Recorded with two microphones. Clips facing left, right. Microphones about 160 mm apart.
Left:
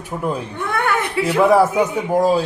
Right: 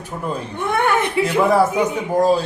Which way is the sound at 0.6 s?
20° right (ahead or behind).